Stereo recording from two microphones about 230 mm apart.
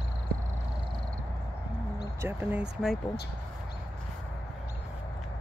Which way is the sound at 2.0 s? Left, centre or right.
Centre.